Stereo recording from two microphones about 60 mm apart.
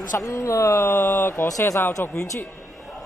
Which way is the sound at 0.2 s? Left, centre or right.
Left.